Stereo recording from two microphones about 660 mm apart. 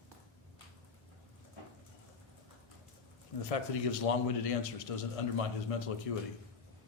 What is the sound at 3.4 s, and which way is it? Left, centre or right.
A man's voice, left.